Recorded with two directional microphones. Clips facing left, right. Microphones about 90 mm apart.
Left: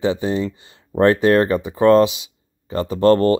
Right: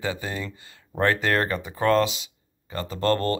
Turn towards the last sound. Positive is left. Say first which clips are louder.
# left 9 dB
turn(degrees=20)  # may be behind; listen again after turning